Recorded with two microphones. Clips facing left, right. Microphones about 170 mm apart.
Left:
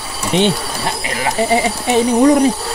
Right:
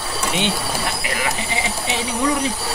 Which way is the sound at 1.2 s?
45° left (ahead or behind).